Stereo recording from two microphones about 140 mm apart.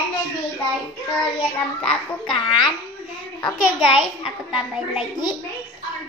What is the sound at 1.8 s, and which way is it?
Speech, 5° left (ahead or behind).